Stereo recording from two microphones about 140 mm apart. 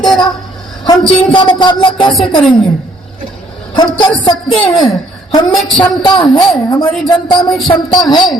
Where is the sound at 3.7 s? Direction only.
30° left (ahead or behind).